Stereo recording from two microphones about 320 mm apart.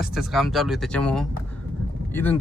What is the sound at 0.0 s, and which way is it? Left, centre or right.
Speech, centre.